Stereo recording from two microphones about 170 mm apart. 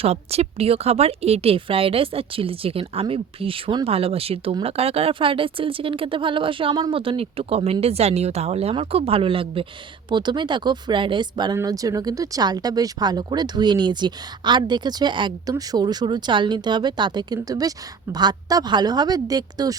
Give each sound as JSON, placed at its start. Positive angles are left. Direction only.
{"t": 0.0, "sound": "speech", "side_deg": -35}